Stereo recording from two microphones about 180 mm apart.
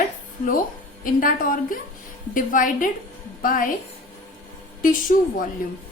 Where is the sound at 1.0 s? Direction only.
50° left (ahead or behind).